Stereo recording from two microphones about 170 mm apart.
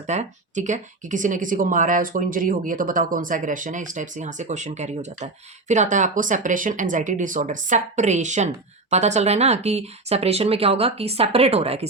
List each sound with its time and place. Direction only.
0.1 s speech: 45° right (ahead or behind)